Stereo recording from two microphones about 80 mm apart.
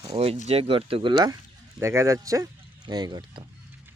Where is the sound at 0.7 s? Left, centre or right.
Right.